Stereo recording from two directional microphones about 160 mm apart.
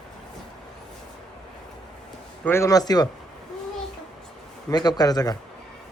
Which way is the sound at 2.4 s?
15° left (ahead or behind).